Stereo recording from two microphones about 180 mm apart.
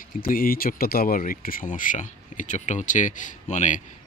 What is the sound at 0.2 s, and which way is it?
Speech, 55° left (ahead or behind).